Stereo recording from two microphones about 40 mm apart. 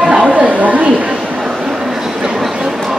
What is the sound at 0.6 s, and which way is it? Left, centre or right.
Chatter, right.